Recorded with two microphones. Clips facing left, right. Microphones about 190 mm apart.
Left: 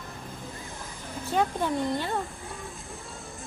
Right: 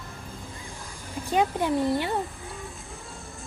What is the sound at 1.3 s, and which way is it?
Speech, 15° right (ahead or behind).